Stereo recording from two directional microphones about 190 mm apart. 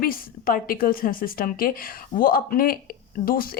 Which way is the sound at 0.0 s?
50° left (ahead or behind).